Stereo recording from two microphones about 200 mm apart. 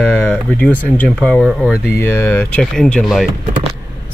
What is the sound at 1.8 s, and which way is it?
Speech, 10° left (ahead or behind).